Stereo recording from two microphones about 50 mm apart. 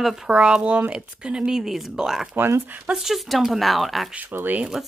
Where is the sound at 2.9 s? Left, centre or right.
Centre.